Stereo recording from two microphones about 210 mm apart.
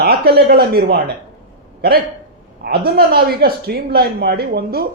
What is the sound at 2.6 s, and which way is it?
A man's voice, 50° right (ahead or behind).